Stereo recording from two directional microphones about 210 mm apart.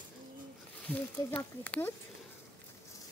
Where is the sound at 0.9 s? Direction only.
10° left (ahead or behind).